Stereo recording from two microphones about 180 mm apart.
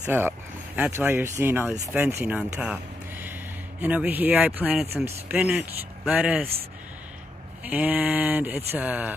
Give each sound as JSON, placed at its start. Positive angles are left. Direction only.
{"t": 0.0, "sound": "speech", "side_deg": -10}
{"t": 7.6, "sound": "speech", "side_deg": -10}